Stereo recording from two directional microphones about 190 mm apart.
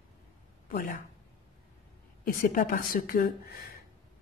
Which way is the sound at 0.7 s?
45° left (ahead or behind).